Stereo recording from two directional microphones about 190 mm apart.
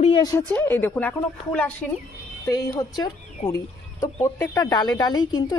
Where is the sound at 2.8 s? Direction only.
20° left (ahead or behind).